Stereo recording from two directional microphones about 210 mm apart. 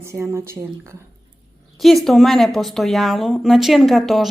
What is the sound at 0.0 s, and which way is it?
Speech, 10° right (ahead or behind).